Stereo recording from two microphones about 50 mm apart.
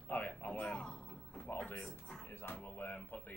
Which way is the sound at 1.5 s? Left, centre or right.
Left.